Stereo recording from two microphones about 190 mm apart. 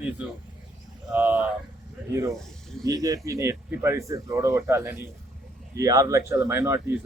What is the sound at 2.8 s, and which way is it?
Speech, 15° right (ahead or behind).